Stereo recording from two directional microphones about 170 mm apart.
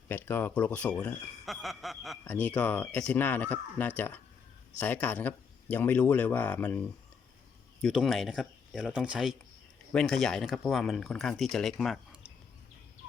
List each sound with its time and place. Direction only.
0.1 s speech: 10° left (ahead or behind)